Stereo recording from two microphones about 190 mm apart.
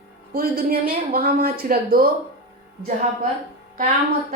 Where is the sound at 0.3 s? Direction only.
55° right (ahead or behind).